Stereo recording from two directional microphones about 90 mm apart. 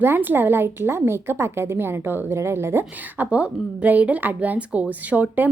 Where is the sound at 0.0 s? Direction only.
25° right (ahead or behind).